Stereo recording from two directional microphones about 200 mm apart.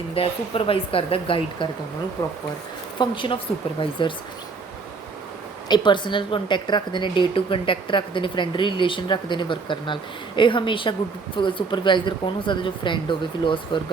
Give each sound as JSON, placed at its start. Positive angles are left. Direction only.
{"t": 0.1, "sound": "a woman's voice", "side_deg": 30}
{"t": 3.0, "sound": "a woman's voice", "side_deg": 25}
{"t": 5.6, "sound": "a woman's voice", "side_deg": 20}